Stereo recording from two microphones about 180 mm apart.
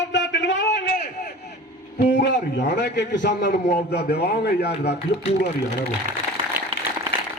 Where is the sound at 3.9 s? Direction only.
65° left (ahead or behind).